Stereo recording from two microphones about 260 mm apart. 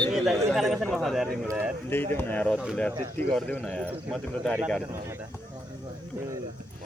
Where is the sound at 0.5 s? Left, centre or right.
Centre.